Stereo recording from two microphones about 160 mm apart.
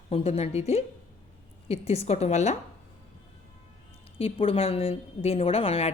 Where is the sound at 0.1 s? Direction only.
40° left (ahead or behind).